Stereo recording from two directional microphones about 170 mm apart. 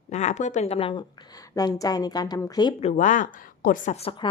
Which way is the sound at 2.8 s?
45° left (ahead or behind).